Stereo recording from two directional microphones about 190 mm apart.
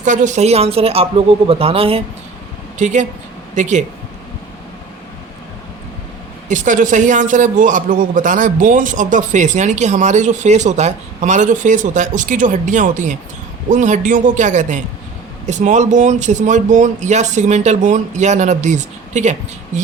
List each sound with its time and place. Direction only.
0.0 s a man's voice: 40° right (ahead or behind)
6.5 s a man's voice: 40° right (ahead or behind)